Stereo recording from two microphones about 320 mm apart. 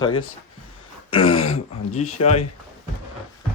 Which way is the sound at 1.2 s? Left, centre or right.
Left.